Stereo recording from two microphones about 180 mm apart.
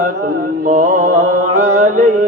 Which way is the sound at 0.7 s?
45° right (ahead or behind).